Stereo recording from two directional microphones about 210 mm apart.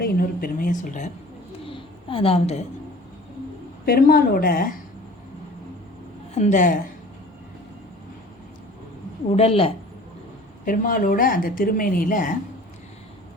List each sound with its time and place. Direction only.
0.0 s speech: 45° left (ahead or behind)
1.6 s a sound: 25° left (ahead or behind)
3.8 s a woman's voice: 45° left (ahead or behind)
6.3 s speech: 35° left (ahead or behind)
9.3 s speech: 30° left (ahead or behind)
10.7 s speech: 40° left (ahead or behind)